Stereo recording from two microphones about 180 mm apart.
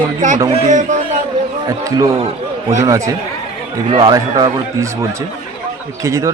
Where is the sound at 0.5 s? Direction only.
45° right (ahead or behind).